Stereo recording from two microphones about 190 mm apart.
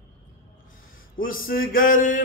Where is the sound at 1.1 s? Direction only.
50° left (ahead or behind).